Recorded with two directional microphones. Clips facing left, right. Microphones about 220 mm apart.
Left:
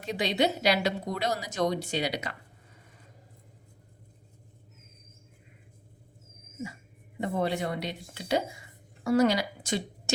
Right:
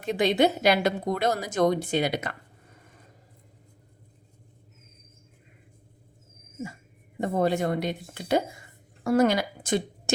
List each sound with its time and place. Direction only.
0.0 s a woman's voice: 50° right (ahead or behind)
7.2 s a woman's voice: 45° right (ahead or behind)